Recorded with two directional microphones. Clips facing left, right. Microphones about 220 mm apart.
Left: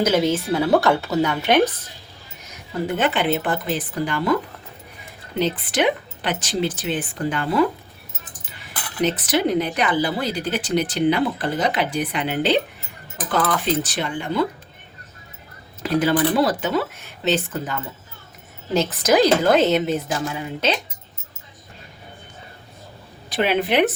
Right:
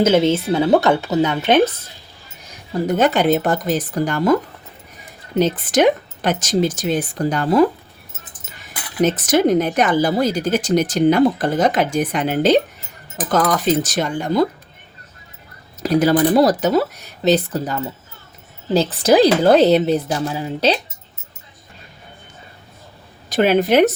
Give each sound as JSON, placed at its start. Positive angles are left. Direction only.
{"t": 0.0, "sound": "speech", "side_deg": -25}
{"t": 2.5, "sound": "speech", "side_deg": -35}
{"t": 5.4, "sound": "speech", "side_deg": -45}
{"t": 9.0, "sound": "speech", "side_deg": -45}
{"t": 15.8, "sound": "speech", "side_deg": -40}
{"t": 23.3, "sound": "speech", "side_deg": -45}